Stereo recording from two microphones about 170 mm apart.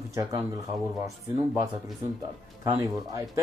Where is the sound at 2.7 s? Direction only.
20° right (ahead or behind).